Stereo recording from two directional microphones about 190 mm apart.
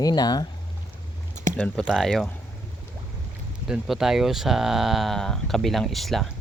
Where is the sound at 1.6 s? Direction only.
10° left (ahead or behind).